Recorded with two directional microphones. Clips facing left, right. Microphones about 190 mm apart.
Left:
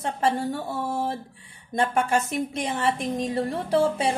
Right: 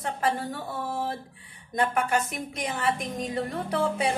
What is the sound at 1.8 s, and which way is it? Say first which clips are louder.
A woman's voice: left 2 dB; 25° left (ahead or behind).